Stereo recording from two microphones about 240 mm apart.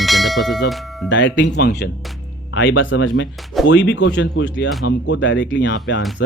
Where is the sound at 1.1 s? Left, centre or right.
Left.